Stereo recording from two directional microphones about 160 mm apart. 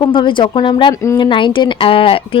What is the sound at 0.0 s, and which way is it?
A woman's voice, 30° left (ahead or behind).